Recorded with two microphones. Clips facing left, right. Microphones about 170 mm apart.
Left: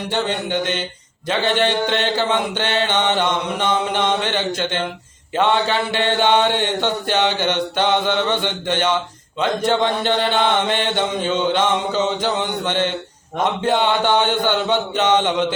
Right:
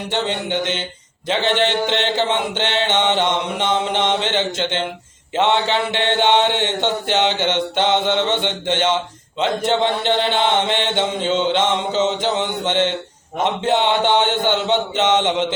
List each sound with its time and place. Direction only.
0.1 s mantra: 20° right (ahead or behind)